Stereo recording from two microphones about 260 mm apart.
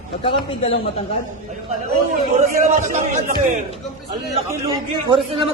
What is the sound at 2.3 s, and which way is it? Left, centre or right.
A man's voice, right.